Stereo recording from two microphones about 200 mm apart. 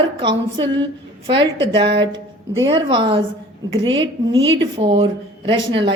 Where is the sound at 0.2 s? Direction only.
20° right (ahead or behind).